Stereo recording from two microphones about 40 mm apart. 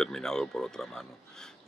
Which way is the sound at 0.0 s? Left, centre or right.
Centre.